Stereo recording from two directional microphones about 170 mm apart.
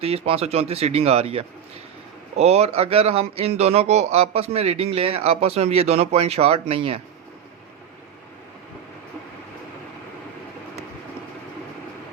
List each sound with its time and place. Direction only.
0.0 s a man's voice: 35° right (ahead or behind)